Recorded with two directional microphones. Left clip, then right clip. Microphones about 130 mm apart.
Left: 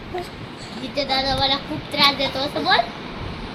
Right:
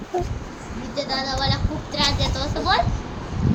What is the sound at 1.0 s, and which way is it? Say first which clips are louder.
Speech: left 4 dB; 45° left (ahead or behind).